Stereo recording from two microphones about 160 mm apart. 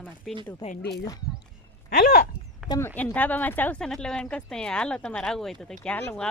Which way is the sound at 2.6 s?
20° left (ahead or behind).